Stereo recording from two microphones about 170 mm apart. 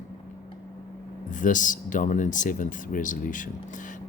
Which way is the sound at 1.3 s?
50° left (ahead or behind).